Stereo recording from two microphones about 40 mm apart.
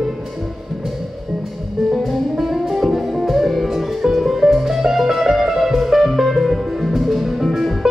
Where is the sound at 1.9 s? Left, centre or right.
Centre.